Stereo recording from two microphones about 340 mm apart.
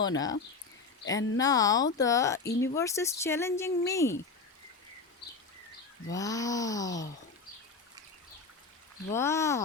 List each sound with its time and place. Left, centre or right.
0.0 s speech: centre
5.2 s a sound: left
6.1 s speech: centre
9.1 s speech: centre